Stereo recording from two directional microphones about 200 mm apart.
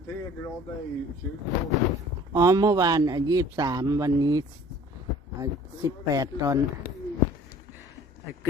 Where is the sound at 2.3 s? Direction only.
15° right (ahead or behind).